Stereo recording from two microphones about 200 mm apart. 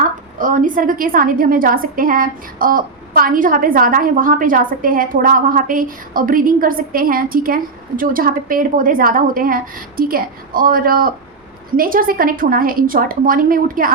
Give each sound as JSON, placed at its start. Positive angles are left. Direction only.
{"t": 0.3, "sound": "a woman's voice", "side_deg": -40}